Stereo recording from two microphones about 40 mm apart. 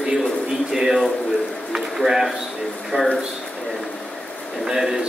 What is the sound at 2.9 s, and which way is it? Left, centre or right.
Speech, right.